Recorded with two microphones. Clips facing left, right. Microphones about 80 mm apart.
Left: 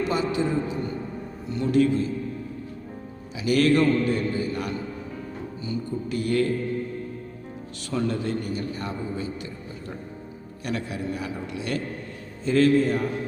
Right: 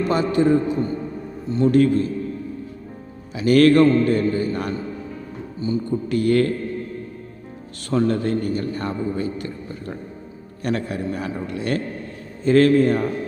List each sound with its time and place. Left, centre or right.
0.0 s a man's voice: right
1.5 s speech: right
1.7 s a man's voice: right
3.3 s a man's voice: right
5.6 s music: right
6.1 s speech: right
7.9 s a man's voice: right
10.6 s a man's voice: right